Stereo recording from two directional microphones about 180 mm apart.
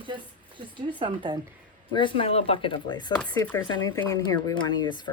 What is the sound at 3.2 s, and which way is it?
Speech, 15° left (ahead or behind).